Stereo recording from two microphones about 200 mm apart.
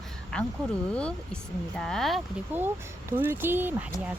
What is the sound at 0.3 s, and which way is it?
Speech, 5° left (ahead or behind).